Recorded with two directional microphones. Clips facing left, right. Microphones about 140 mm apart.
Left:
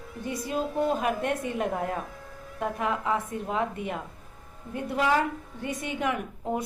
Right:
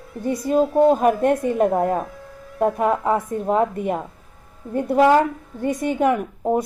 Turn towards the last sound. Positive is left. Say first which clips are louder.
# right 9 dB
turn(degrees=-40)  # may be behind; listen again after turning